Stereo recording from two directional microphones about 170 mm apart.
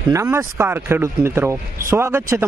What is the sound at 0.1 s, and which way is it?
Speech, 15° right (ahead or behind).